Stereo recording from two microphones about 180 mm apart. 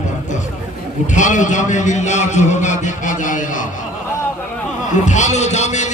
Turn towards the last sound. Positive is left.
turn(degrees=40)  # may be behind; listen again after turning